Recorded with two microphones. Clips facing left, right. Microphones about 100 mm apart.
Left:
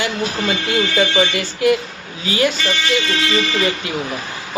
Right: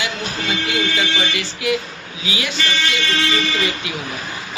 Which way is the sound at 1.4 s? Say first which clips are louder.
Left 5 dB; 45° left (ahead or behind).